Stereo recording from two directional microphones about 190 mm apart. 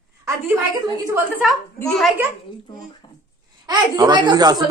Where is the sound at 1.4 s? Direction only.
Centre (ahead or behind).